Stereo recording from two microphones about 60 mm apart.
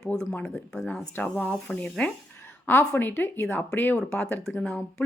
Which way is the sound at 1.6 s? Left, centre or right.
Centre.